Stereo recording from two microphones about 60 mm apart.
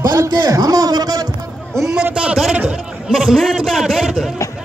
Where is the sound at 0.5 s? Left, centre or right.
Right.